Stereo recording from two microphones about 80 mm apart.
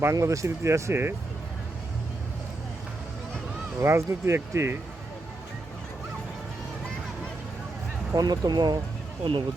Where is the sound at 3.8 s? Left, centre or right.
Right.